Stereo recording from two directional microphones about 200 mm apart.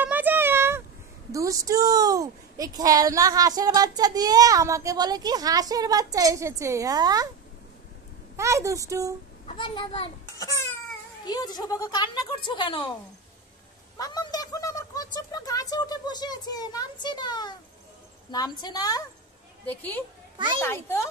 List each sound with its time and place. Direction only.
0.0 s a sound: 10° right (ahead or behind)
1.3 s a woman's voice: 15° right (ahead or behind)
8.4 s a woman's voice: 15° right (ahead or behind)
9.5 s a child's voice: 25° left (ahead or behind)
13.9 s a woman's voice: 20° left (ahead or behind)
20.6 s speech: 15° left (ahead or behind)